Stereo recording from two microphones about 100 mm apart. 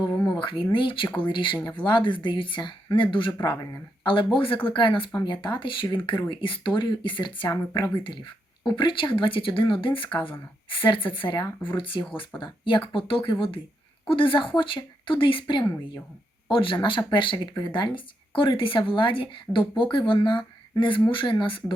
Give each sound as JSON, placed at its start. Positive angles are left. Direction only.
{"t": 0.3, "sound": "speech", "side_deg": 55}